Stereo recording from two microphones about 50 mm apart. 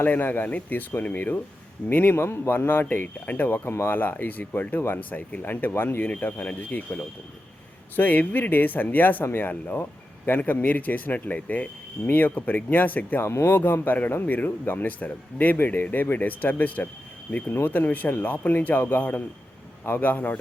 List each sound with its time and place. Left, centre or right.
0.0 s speech: left
2.1 s a man's voice: left
3.2 s speech: left
3.7 s speech: left
3.9 s speech: left
6.0 s a man's voice: left
13.2 s speech: left